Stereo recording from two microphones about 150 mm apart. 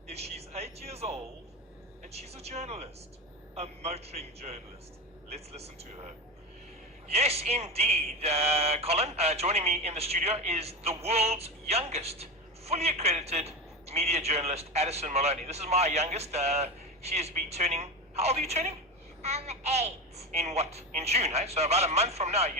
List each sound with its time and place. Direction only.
0.1 s speech: 45° right (ahead or behind)
7.1 s speech: 45° right (ahead or behind)